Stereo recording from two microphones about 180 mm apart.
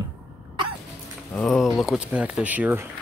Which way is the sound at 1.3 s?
Centre (ahead or behind).